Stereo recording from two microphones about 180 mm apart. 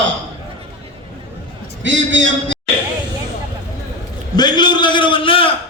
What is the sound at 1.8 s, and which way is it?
Speech, 90° right.